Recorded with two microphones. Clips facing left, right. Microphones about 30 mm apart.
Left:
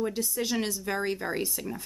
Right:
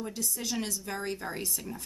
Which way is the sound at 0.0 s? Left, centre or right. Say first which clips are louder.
Left 6 dB; left.